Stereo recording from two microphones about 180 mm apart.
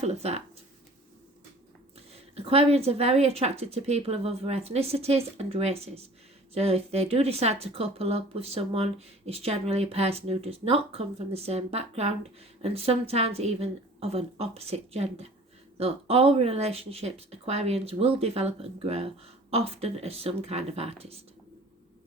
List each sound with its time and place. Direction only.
0.0 s speech: 35° right (ahead or behind)
2.0 s speech: 35° right (ahead or behind)